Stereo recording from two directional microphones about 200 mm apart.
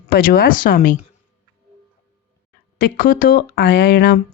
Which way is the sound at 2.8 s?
45° left (ahead or behind).